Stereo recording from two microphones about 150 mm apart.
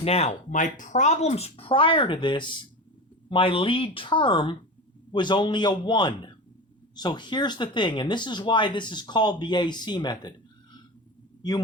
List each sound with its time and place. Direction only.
0.0 s speech: 45° left (ahead or behind)